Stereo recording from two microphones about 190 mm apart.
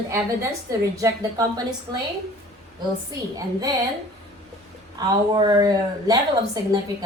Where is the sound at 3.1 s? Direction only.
20° right (ahead or behind).